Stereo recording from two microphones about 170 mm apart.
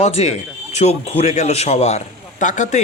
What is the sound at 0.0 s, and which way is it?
A man's voice, 40° left (ahead or behind).